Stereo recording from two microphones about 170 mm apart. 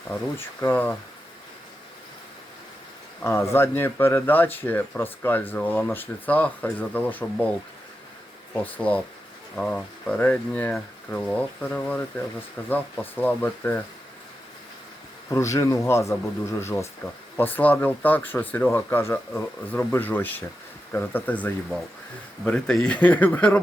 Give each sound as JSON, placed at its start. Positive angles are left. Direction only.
{"t": 0.1, "sound": "speech", "side_deg": 15}
{"t": 3.2, "sound": "speech", "side_deg": 15}
{"t": 8.6, "sound": "speech", "side_deg": 10}
{"t": 15.3, "sound": "speech", "side_deg": 15}